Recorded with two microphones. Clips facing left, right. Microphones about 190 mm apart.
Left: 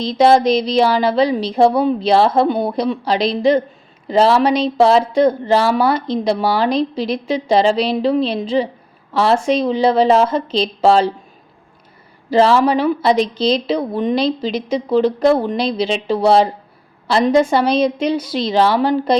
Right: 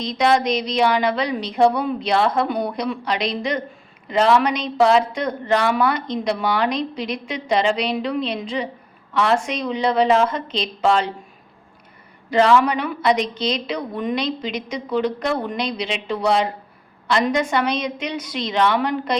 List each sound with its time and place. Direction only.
0.0 s a woman's voice: 30° left (ahead or behind)
12.3 s a woman's voice: 35° left (ahead or behind)